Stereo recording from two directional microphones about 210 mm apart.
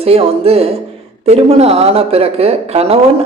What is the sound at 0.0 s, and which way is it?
Speech, 30° right (ahead or behind).